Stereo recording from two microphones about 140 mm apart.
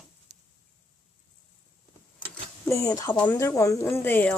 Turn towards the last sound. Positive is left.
turn(degrees=10)  # may be behind; listen again after turning